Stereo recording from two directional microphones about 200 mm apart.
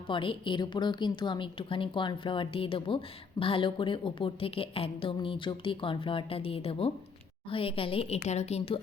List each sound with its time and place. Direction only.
0.1 s a woman's voice: 25° left (ahead or behind)